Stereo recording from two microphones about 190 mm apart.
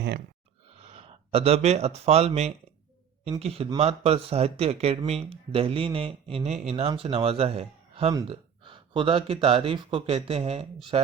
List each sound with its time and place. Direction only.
0.8 s speech: 35° right (ahead or behind)